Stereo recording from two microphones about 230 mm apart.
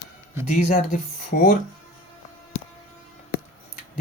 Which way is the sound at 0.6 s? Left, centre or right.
Left.